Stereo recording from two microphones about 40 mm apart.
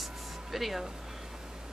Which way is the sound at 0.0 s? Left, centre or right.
Centre.